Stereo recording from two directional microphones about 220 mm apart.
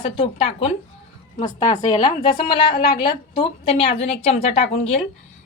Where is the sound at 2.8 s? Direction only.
45° left (ahead or behind).